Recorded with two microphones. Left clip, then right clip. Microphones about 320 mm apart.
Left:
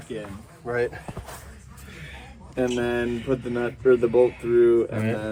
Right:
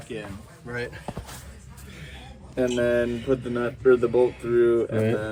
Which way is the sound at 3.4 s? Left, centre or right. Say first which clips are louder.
Even; centre.